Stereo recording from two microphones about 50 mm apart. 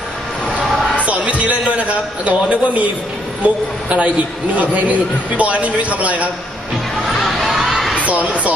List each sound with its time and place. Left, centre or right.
1.0 s a sound: right
2.2 s a man's voice: right
7.1 s crowd: centre
7.9 s speech: right